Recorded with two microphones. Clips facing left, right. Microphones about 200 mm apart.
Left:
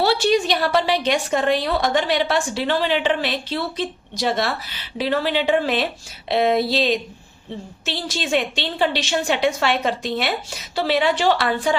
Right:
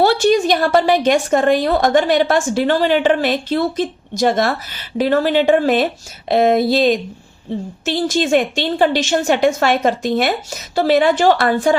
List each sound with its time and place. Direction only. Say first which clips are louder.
0.0 s a woman's voice: right 5 dB; 50° right (ahead or behind)